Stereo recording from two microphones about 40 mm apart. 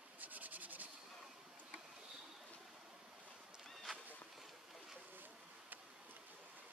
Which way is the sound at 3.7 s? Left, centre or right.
Centre.